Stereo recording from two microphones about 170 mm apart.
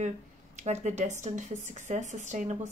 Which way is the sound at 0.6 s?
40° right (ahead or behind).